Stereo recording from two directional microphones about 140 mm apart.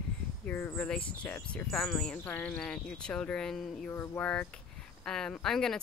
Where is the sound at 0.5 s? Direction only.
15° left (ahead or behind).